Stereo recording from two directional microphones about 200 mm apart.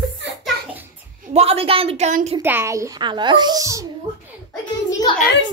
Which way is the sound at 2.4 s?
10° right (ahead or behind).